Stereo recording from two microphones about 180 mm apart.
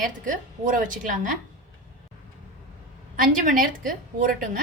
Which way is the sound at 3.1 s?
50° right (ahead or behind).